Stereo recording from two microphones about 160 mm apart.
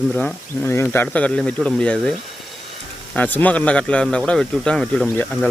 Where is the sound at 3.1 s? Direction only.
10° left (ahead or behind).